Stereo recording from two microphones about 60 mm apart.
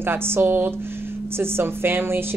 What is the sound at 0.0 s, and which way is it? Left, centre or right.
A woman's voice, right.